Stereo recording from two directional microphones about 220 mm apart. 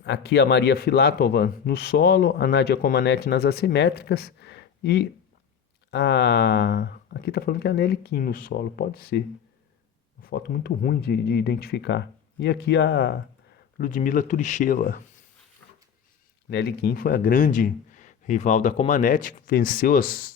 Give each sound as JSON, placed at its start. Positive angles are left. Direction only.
{"t": 0.0, "sound": "speech", "side_deg": 50}
{"t": 10.2, "sound": "speech", "side_deg": 40}
{"t": 13.7, "sound": "speech", "side_deg": 35}
{"t": 16.5, "sound": "speech", "side_deg": 50}